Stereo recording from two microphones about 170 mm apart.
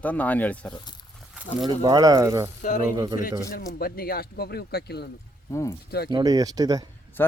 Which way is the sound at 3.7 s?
60° left (ahead or behind).